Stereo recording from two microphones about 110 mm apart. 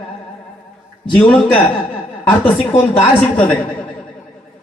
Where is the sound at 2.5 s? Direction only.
65° left (ahead or behind).